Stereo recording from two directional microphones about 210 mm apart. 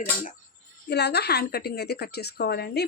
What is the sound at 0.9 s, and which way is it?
A woman's voice, 50° left (ahead or behind).